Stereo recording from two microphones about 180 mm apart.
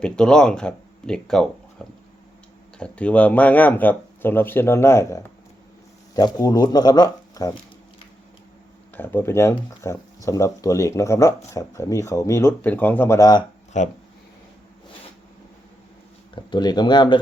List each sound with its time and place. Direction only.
0.0 s speech: 5° left (ahead or behind); by 7.5 s 20° left (ahead or behind)
9.0 s speech: 10° left (ahead or behind)
16.3 s speech: 25° left (ahead or behind)